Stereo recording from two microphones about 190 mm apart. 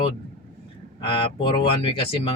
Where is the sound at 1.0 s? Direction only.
30° left (ahead or behind).